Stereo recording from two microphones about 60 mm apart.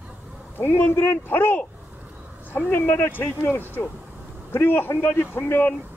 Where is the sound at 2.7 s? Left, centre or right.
Left.